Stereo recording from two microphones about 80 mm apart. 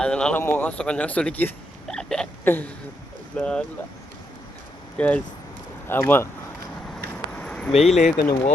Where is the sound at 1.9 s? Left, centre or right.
Centre.